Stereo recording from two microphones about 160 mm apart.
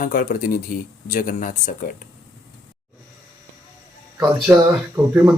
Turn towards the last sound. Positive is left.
turn(degrees=-15)  # may be behind; listen again after turning